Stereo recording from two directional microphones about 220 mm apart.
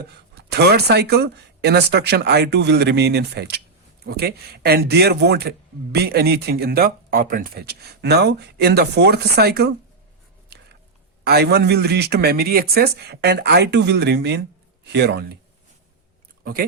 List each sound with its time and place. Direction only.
0.3 s a man's voice: 50° right (ahead or behind)
11.2 s a man's voice: 50° right (ahead or behind)
16.4 s speech: 40° right (ahead or behind)